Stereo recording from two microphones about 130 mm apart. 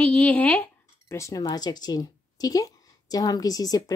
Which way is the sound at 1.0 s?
25° left (ahead or behind).